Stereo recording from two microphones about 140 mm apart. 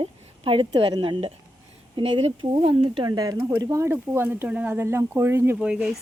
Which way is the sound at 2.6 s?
35° right (ahead or behind).